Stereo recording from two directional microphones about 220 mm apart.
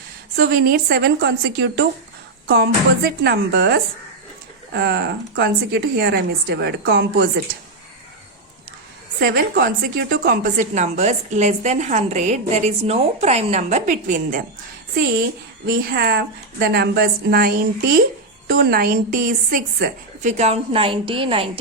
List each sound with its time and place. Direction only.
0.3 s a woman's voice: 40° right (ahead or behind)
3.2 s a woman's voice: 45° right (ahead or behind)
9.2 s a woman's voice: 45° right (ahead or behind)
15.6 s a woman's voice: 45° right (ahead or behind); by 21.6 s 25° right (ahead or behind)